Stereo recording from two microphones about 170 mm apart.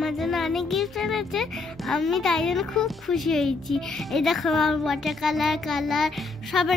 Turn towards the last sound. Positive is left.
turn(degrees=0)  # may be behind; listen again after turning